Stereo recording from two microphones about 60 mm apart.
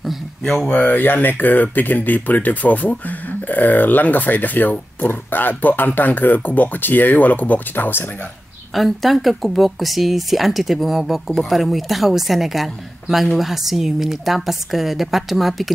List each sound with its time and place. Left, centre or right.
0.0 s a sound: centre
0.7 s speech: left
8.7 s speech: centre